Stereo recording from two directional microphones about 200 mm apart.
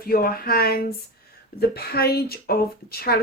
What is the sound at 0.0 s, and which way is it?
Speech, 45° left (ahead or behind).